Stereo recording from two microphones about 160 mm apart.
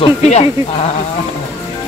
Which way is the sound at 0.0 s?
40° left (ahead or behind).